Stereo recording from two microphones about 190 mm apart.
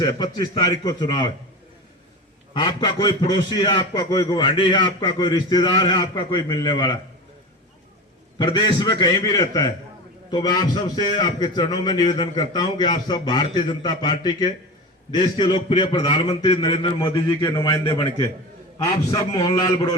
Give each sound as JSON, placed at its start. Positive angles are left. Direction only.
{"t": 0.0, "sound": "a man's voice", "side_deg": 20}
{"t": 2.5, "sound": "a man's voice", "side_deg": 20}
{"t": 8.4, "sound": "a man's voice", "side_deg": 20}